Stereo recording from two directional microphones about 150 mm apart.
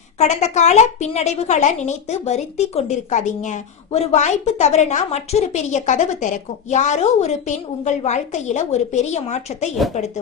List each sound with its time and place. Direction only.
0.2 s a woman's voice: 50° left (ahead or behind)